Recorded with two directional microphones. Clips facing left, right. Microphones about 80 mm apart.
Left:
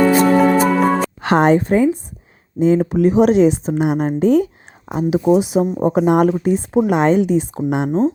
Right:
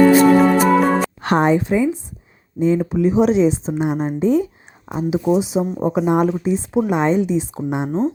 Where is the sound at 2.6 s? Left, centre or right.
Left.